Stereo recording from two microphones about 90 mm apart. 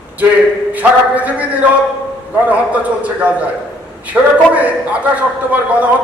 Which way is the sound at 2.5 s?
15° right (ahead or behind).